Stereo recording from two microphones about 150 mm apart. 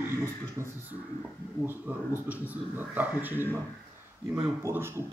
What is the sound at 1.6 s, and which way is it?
Speech, 10° right (ahead or behind).